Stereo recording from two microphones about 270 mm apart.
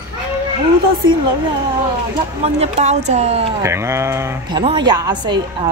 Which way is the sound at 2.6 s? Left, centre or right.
Right.